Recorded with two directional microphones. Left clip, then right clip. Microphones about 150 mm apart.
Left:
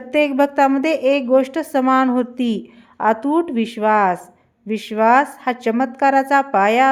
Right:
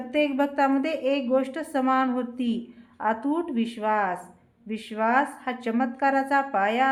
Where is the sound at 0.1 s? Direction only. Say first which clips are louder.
Left 8 dB; 45° left (ahead or behind).